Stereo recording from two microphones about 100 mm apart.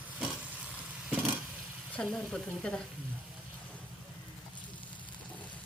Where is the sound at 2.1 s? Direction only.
5° left (ahead or behind).